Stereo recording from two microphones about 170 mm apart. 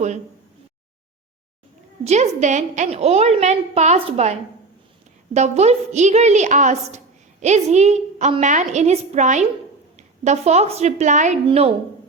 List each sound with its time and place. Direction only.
2.0 s a woman's voice: 40° right (ahead or behind)